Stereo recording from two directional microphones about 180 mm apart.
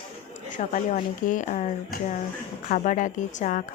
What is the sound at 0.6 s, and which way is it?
Speech, 45° left (ahead or behind).